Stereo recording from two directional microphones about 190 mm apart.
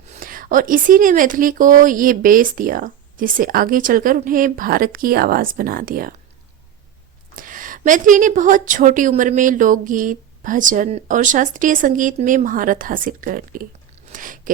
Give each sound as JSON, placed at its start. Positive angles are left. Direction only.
{"t": 0.1, "sound": "a woman's voice", "side_deg": -45}
{"t": 7.3, "sound": "a woman's voice", "side_deg": -45}
{"t": 14.1, "sound": "chewing", "side_deg": -45}